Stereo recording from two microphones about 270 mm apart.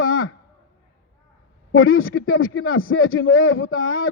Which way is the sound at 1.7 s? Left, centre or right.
Left.